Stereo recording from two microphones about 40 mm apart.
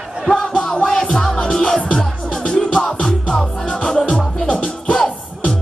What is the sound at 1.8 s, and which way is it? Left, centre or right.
Music, left.